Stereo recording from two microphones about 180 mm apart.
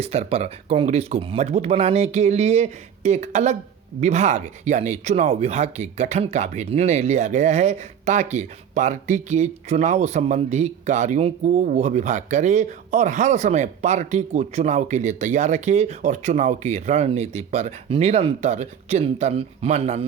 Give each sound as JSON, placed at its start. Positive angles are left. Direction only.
{"t": 0.0, "sound": "speech", "side_deg": -35}